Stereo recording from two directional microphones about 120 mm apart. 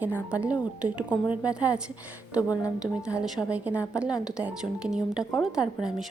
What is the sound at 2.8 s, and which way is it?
A woman's voice, 5° right (ahead or behind).